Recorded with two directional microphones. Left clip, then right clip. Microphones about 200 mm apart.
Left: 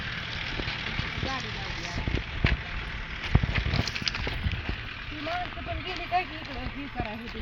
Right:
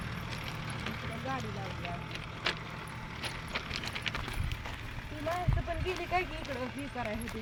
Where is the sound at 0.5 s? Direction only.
65° right (ahead or behind).